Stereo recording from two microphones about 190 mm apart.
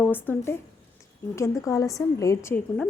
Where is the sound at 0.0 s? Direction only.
10° left (ahead or behind).